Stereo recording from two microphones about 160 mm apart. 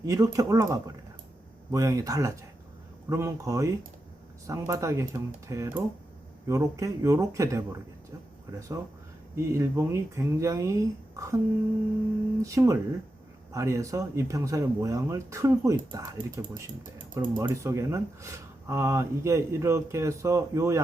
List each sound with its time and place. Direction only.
0.0 s speech: 20° right (ahead or behind)
12.4 s speech: 20° right (ahead or behind)